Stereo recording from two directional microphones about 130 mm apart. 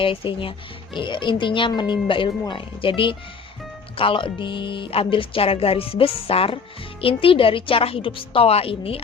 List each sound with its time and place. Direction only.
0.0 s speech: 45° left (ahead or behind)